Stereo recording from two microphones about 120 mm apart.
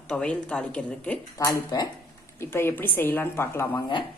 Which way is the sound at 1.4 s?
30° left (ahead or behind).